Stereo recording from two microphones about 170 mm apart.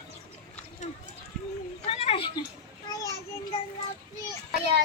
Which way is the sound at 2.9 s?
20° left (ahead or behind).